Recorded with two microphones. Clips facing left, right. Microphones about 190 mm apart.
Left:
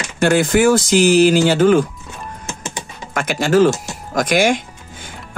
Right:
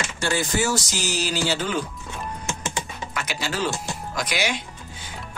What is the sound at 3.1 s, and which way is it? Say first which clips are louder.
Speech: left 16 dB; 50° left (ahead or behind).